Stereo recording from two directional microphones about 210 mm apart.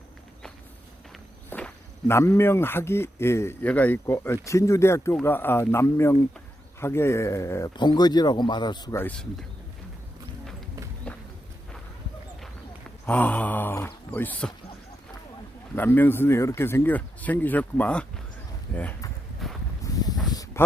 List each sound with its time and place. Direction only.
1.5 s speech: 5° left (ahead or behind)
11.1 s walk: 5° left (ahead or behind)
13.1 s speech: 10° left (ahead or behind)
15.7 s speech: 10° left (ahead or behind)
18.7 s a sound: 10° left (ahead or behind)
19.8 s a sound: 20° left (ahead or behind)
20.3 s snake: 15° left (ahead or behind)